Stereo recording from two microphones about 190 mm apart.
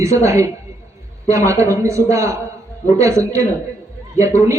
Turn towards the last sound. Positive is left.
turn(degrees=-15)  # may be behind; listen again after turning